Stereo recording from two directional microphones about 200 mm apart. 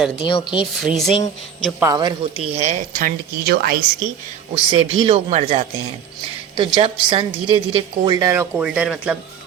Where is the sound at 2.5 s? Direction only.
35° right (ahead or behind).